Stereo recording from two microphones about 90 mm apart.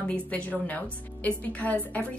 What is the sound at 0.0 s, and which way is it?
A woman's voice, 15° left (ahead or behind).